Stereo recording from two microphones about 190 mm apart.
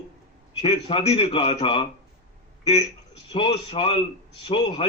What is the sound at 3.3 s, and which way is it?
A man's voice, 30° left (ahead or behind).